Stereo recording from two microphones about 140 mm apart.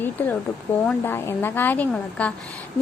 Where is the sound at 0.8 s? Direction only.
15° left (ahead or behind).